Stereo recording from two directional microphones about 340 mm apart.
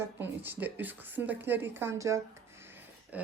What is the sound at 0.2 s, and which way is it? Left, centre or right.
A woman's voice, centre.